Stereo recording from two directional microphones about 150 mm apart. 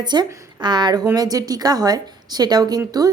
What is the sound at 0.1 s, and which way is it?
A woman's voice, 30° right (ahead or behind).